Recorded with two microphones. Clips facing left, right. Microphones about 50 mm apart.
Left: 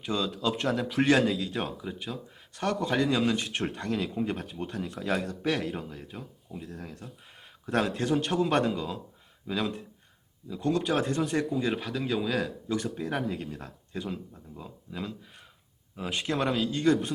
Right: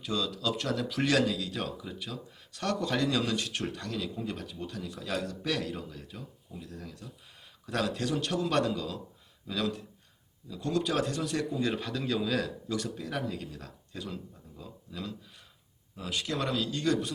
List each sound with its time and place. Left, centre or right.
0.0 s speech: left
11.5 s speech: centre
12.7 s speech: left